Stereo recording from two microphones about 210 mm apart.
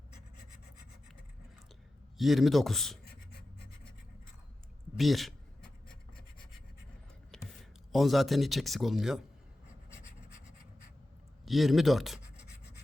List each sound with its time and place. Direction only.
2.1 s a man's voice: centre (ahead or behind)
3.0 s writing: 50° left (ahead or behind)
4.9 s writing: centre (ahead or behind)
7.3 s speech: centre (ahead or behind)
11.4 s speech: centre (ahead or behind)